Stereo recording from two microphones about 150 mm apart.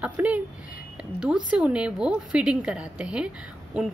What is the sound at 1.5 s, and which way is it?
A woman's voice, 10° right (ahead or behind).